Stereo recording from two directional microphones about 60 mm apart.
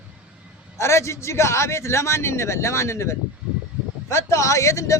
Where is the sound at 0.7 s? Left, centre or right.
Left.